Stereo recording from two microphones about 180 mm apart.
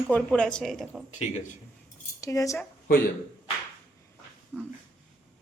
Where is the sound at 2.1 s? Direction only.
20° left (ahead or behind).